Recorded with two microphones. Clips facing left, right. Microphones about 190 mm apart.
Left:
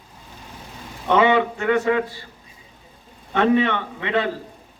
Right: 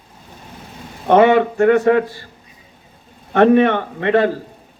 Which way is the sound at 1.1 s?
50° right (ahead or behind).